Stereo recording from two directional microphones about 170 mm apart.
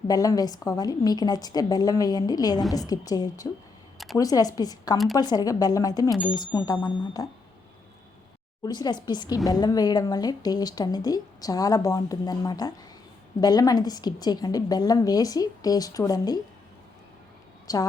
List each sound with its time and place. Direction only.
0.1 s speech: 20° left (ahead or behind)
3.9 s a sound: centre (ahead or behind)
4.2 s speech: 20° left (ahead or behind)
8.6 s speech: 25° left (ahead or behind)
17.7 s speech: 20° left (ahead or behind)